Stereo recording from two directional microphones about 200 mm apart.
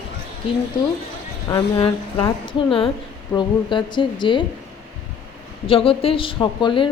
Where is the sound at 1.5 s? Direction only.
25° left (ahead or behind).